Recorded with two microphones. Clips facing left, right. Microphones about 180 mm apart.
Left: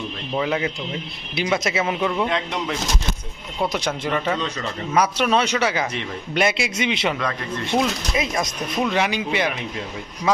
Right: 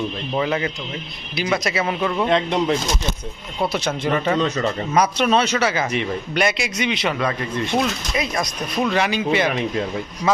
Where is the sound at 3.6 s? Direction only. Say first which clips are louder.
Right 1 dB; 15° left (ahead or behind).